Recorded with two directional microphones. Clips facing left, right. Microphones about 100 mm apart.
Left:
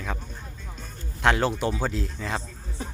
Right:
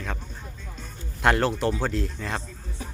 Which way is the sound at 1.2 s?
Centre (ahead or behind).